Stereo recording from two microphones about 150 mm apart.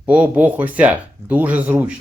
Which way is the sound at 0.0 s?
10° right (ahead or behind).